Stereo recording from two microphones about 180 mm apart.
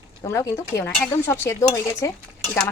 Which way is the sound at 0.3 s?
15° left (ahead or behind).